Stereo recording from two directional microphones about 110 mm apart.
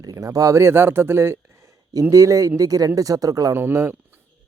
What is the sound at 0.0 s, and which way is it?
Speech, 30° right (ahead or behind).